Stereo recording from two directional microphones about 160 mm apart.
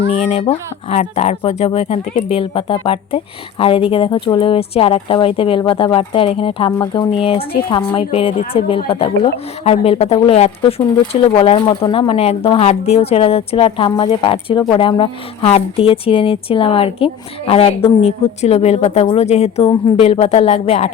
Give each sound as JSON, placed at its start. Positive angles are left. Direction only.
{"t": 0.1, "sound": "speech", "side_deg": 45}